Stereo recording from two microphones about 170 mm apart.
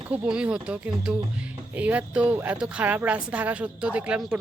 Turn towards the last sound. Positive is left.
turn(degrees=-5)  # may be behind; listen again after turning